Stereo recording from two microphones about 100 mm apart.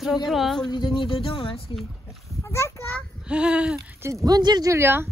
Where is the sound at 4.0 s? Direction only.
35° right (ahead or behind).